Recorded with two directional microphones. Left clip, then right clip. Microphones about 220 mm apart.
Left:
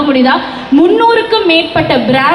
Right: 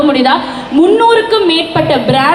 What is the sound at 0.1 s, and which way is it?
A woman's voice, 40° right (ahead or behind).